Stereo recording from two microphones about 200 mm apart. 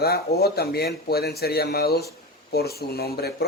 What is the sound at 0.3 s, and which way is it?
Speech, 50° left (ahead or behind).